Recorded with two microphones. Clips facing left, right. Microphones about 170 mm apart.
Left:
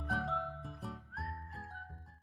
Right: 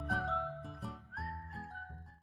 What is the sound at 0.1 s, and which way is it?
Music, centre (ahead or behind).